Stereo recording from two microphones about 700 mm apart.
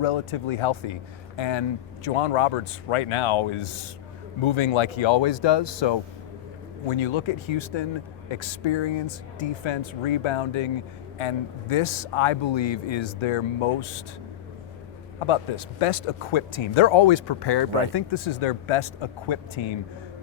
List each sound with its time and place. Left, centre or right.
0.0 s a man's voice: left
15.3 s speech: left